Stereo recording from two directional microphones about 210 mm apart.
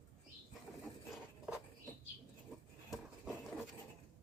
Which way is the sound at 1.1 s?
Centre (ahead or behind).